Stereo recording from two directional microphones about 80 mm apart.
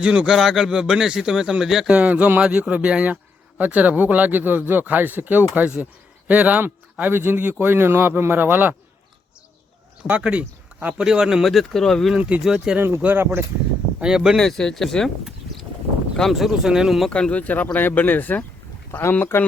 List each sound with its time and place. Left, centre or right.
0.0 s speech: centre
2.0 s speech: centre
10.0 s speech: centre
12.1 s speech: centre
13.0 s speech: right
14.0 s speech: centre
14.3 s speech: centre
17.1 s speech: centre
18.9 s speech: left